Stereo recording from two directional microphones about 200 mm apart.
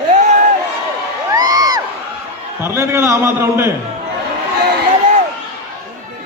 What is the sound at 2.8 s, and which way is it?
Speech, 15° right (ahead or behind).